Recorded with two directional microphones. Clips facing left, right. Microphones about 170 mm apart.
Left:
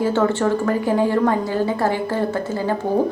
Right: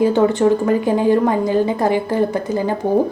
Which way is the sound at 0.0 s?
15° right (ahead or behind).